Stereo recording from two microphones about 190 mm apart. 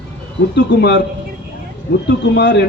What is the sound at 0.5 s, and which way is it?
Speech, 60° left (ahead or behind).